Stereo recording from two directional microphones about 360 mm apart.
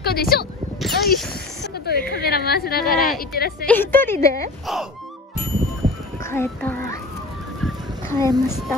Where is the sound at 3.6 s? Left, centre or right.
Centre.